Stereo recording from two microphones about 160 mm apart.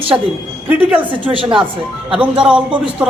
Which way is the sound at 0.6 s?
10° right (ahead or behind).